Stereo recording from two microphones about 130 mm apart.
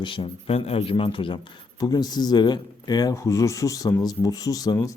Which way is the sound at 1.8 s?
30° left (ahead or behind).